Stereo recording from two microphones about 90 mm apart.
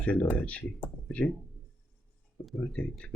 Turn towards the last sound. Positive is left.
turn(degrees=10)  # may be behind; listen again after turning